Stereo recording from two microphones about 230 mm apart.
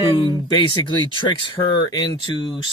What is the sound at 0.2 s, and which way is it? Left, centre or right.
Speech, left.